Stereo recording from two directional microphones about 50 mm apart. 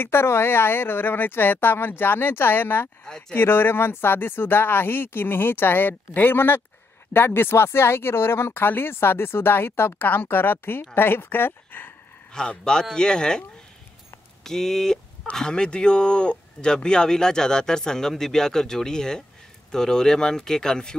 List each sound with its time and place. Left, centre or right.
0.0 s speech: left
3.1 s speech: centre
3.3 s speech: left
12.3 s speech: centre
14.4 s speech: centre